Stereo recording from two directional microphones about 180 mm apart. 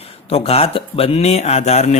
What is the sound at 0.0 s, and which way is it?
Speech, 35° left (ahead or behind).